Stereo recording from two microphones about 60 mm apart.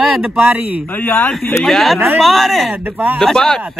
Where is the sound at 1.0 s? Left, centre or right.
Left.